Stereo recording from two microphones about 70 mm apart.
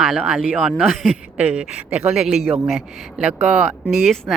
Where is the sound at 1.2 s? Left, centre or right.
Centre.